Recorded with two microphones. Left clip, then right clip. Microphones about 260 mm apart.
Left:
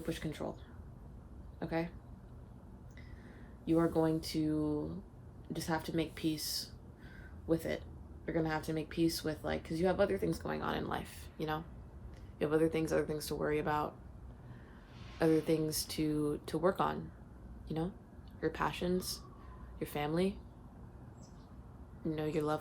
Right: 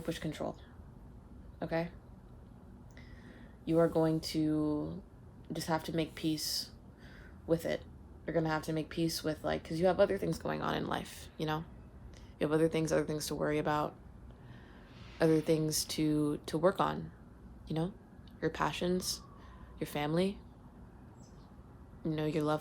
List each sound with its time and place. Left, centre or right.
0.0 s speech: right
1.5 s speech: right
3.7 s speech: right
15.2 s speech: right
22.0 s speech: right